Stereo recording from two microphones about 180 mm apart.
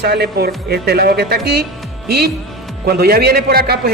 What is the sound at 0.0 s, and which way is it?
A man's voice, 65° right (ahead or behind).